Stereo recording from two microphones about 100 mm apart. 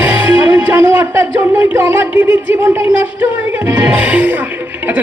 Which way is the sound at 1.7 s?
20° right (ahead or behind).